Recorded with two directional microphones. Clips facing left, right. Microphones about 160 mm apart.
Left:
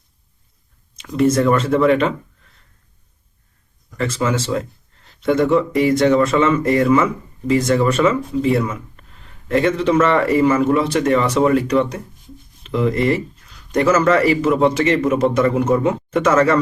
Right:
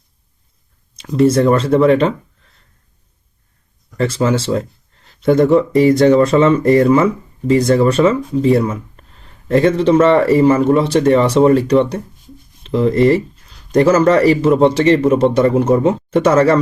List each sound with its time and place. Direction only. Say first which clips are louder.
0.9 s speech: right 4 dB; 35° right (ahead or behind)
3.9 s speech: right 4 dB; 35° right (ahead or behind)